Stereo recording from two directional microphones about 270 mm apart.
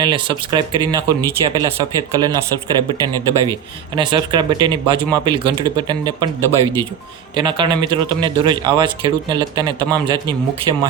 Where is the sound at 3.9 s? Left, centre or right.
Centre.